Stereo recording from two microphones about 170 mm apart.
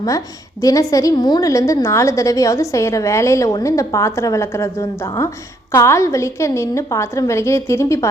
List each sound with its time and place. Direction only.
0.6 s a woman's voice: 20° left (ahead or behind)